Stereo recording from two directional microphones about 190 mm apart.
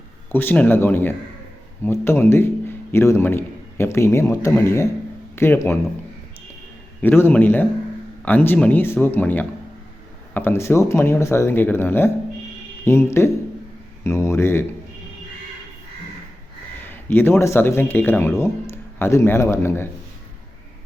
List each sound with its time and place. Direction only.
0.3 s a man's voice: 10° left (ahead or behind)
7.0 s a man's voice: 10° left (ahead or behind)
16.8 s speech: 10° left (ahead or behind)